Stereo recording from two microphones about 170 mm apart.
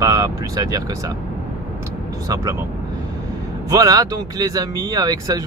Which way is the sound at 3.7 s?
20° right (ahead or behind).